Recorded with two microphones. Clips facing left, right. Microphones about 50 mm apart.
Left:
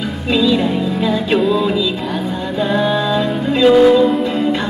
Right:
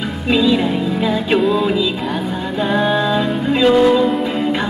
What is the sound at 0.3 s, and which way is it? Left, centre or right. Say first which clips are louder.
Music: even; centre.